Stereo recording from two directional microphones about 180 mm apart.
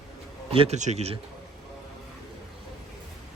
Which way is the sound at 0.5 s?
35° right (ahead or behind).